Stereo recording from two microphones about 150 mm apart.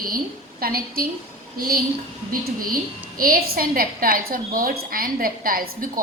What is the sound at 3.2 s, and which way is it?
A woman's voice, 75° right (ahead or behind).